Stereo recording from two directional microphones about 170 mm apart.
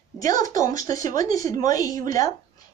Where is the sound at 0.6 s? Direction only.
20° left (ahead or behind).